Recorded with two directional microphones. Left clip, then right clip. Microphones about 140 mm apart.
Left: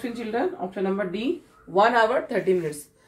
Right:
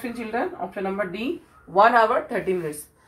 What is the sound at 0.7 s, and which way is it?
Speech, 25° left (ahead or behind).